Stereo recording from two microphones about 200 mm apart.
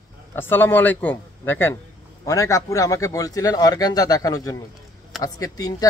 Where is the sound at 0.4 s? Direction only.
10° left (ahead or behind).